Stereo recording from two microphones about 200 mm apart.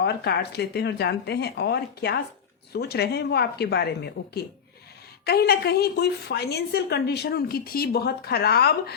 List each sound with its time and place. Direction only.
0.0 s a woman's voice: 55° left (ahead or behind)